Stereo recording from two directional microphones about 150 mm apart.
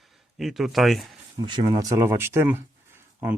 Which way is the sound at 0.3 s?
Centre (ahead or behind).